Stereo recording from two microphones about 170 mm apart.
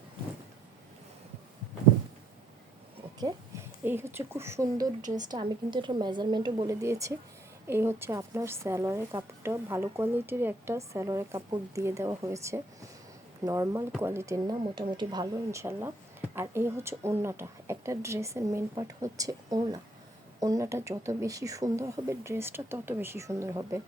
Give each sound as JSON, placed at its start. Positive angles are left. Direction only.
{"t": 3.2, "sound": "a woman's voice", "side_deg": -20}